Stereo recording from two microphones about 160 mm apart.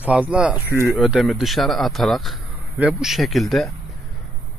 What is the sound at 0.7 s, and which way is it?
Speech, 15° left (ahead or behind).